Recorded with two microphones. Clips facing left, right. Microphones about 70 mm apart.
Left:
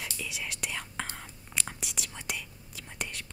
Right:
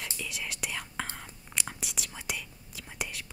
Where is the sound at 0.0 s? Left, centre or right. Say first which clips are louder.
Even; centre.